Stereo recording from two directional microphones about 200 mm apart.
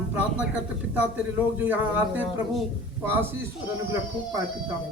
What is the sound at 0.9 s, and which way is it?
A man's voice, 10° right (ahead or behind).